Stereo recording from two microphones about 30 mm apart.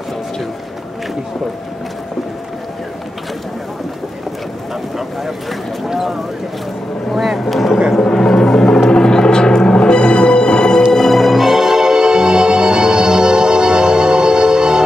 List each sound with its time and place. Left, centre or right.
7.1 s vehicle: centre
8.0 s music: left
10.9 s music: centre; by 14.8 s right